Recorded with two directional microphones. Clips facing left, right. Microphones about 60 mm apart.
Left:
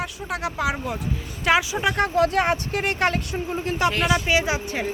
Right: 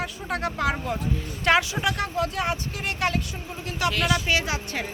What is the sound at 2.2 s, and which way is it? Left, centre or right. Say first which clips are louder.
Speech: left 6 dB; left.